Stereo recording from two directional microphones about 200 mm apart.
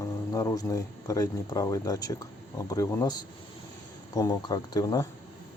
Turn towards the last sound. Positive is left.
turn(degrees=20)  # may be behind; listen again after turning